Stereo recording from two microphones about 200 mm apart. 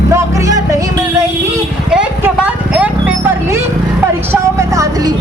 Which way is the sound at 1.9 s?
5° right (ahead or behind).